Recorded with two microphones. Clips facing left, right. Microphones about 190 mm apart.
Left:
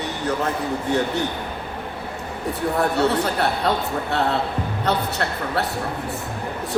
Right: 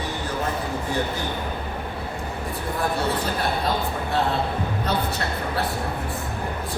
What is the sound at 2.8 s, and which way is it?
A man's voice, 70° left (ahead or behind).